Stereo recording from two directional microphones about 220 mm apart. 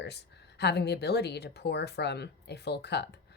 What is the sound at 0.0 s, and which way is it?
A woman's voice, 50° left (ahead or behind).